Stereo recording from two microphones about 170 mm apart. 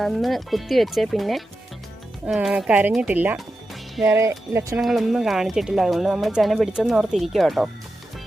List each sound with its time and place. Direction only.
0.0 s speech: centre (ahead or behind); by 4.8 s 15° right (ahead or behind)
4.8 s speech: centre (ahead or behind)